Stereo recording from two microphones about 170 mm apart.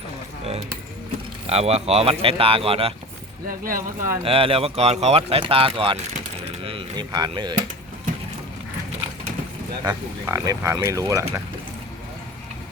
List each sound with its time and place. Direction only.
1.5 s speech: 40° right (ahead or behind)
3.6 s speech: 55° right (ahead or behind)
4.2 s speech: 35° right (ahead or behind)
6.6 s chop: 35° right (ahead or behind)
9.8 s speech: 15° right (ahead or behind)